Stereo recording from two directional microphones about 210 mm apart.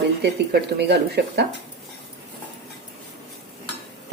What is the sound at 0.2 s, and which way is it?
Speech, 50° right (ahead or behind).